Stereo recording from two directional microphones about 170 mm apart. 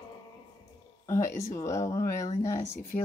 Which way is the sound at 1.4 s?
15° left (ahead or behind).